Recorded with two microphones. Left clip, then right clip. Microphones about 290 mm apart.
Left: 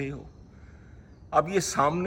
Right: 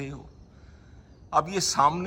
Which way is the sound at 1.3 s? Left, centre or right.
Centre.